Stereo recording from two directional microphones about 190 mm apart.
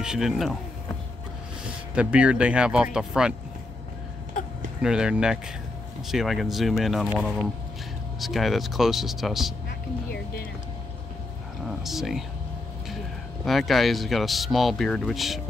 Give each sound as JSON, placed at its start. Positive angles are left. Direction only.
{"t": 0.0, "sound": "speech", "side_deg": -5}
{"t": 2.0, "sound": "speech", "side_deg": -5}
{"t": 4.8, "sound": "speech", "side_deg": -5}
{"t": 9.7, "sound": "speech", "side_deg": 55}
{"t": 11.8, "sound": "speech", "side_deg": 0}
{"t": 13.5, "sound": "speech", "side_deg": 0}